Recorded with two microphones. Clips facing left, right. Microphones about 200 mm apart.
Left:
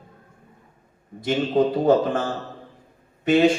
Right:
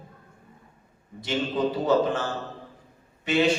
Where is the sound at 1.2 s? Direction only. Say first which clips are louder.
Left 6 dB; 50° left (ahead or behind).